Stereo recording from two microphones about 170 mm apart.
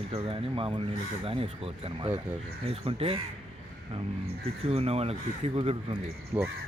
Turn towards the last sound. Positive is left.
turn(degrees=-10)  # may be behind; listen again after turning